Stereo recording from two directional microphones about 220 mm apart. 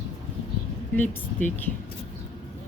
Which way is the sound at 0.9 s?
10° left (ahead or behind).